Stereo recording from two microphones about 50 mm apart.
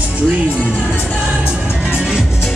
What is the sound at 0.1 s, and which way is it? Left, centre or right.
Music, right.